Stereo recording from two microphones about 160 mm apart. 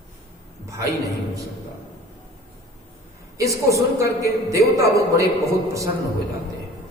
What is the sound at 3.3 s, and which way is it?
A man's voice, 20° right (ahead or behind).